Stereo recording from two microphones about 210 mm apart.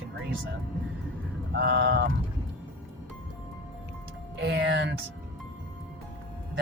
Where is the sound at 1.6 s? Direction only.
50° right (ahead or behind).